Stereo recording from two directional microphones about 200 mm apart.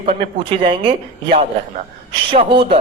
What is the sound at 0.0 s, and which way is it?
Speech, 35° right (ahead or behind).